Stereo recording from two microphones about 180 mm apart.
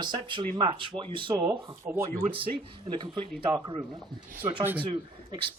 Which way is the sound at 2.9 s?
25° right (ahead or behind).